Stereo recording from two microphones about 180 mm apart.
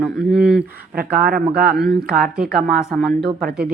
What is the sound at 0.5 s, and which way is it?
Speech, 55° right (ahead or behind).